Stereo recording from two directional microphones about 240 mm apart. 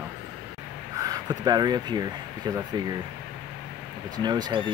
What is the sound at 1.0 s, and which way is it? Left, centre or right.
Speech, centre.